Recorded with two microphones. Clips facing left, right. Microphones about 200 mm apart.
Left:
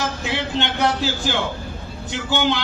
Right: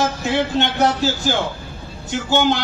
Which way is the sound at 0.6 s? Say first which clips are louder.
Right 3 dB; 45° right (ahead or behind).